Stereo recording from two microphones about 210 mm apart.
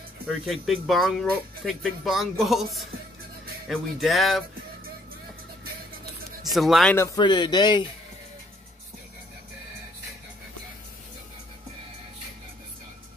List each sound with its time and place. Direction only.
0.3 s speech: centre (ahead or behind)
6.5 s speech: centre (ahead or behind); by 7.8 s 20° left (ahead or behind)